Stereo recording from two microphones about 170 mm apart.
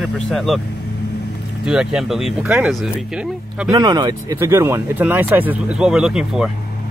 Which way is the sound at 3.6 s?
25° right (ahead or behind).